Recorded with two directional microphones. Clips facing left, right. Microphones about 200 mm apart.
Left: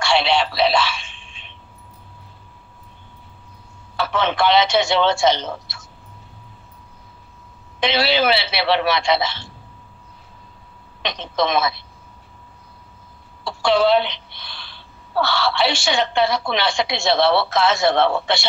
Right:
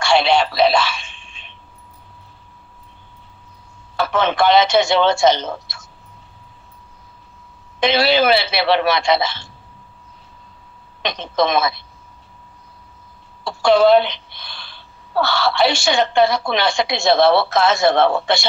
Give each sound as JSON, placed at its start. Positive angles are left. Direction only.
{"t": 0.0, "sound": "a sound", "side_deg": -45}
{"t": 3.9, "sound": "a woman's voice", "side_deg": -45}
{"t": 7.8, "sound": "a woman's voice", "side_deg": -45}
{"t": 11.0, "sound": "a woman's voice", "side_deg": -45}
{"t": 13.4, "sound": "a woman's voice", "side_deg": -45}